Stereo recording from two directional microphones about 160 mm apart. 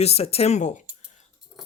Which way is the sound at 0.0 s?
40° left (ahead or behind).